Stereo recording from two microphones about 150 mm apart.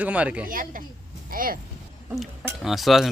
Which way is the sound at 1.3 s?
70° right (ahead or behind).